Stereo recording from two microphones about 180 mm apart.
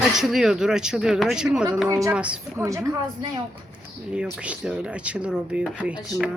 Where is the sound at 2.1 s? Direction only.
5° right (ahead or behind).